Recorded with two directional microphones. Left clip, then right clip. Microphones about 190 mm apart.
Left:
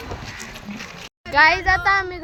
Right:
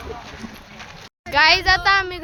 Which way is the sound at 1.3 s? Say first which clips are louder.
Even; 5° right (ahead or behind).